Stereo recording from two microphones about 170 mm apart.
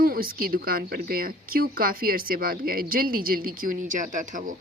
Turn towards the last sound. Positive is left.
turn(degrees=-50)  # may be behind; listen again after turning